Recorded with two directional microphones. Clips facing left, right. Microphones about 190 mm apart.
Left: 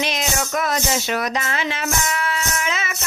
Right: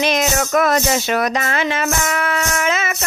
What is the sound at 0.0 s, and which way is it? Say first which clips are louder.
Music: right 6 dB; 50° right (ahead or behind).